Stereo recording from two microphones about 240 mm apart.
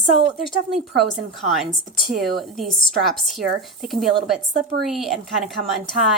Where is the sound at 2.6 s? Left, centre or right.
Centre.